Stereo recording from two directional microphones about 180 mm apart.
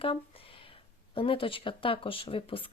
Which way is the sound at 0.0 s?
30° left (ahead or behind).